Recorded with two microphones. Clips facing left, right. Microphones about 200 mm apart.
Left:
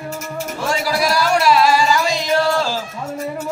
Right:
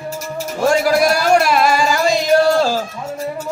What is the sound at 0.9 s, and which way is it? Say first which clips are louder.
Music: right 1 dB; 50° right (ahead or behind).